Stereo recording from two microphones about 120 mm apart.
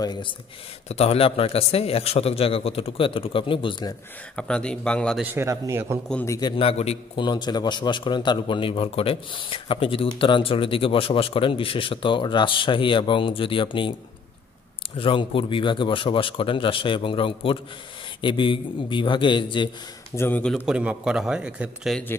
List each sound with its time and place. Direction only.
0.0 s speech: 35° left (ahead or behind)
0.8 s a man's voice: 60° left (ahead or behind)
4.4 s speech: 10° left (ahead or behind)
5.2 s a man's voice: 20° right (ahead or behind)
6.2 s a man's voice: 25° left (ahead or behind)
6.5 s a man's voice: 55° left (ahead or behind)
7.2 s a man's voice: 40° left (ahead or behind)
15.0 s a man's voice: 45° left (ahead or behind)
20.2 s speech: 15° left (ahead or behind)
20.5 s a man's voice: 10° right (ahead or behind)